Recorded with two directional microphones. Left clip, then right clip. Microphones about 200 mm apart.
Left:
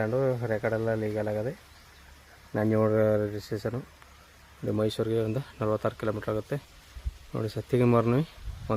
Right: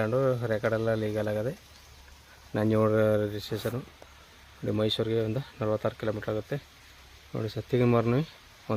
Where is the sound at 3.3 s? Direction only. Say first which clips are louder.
Even; 10° left (ahead or behind).